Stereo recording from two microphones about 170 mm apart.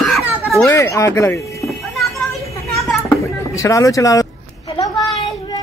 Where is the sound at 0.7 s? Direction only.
15° left (ahead or behind).